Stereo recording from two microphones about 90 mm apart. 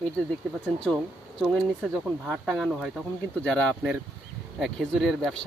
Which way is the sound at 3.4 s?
10° left (ahead or behind).